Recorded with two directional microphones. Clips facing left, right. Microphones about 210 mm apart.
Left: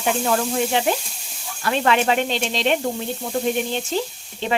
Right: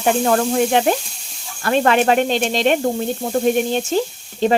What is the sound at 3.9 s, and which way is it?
Frying, 50° right (ahead or behind).